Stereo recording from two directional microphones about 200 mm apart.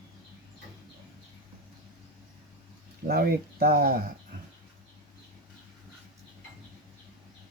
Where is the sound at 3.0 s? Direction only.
50° right (ahead or behind).